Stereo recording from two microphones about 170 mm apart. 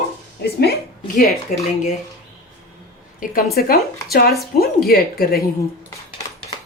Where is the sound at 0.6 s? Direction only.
60° left (ahead or behind).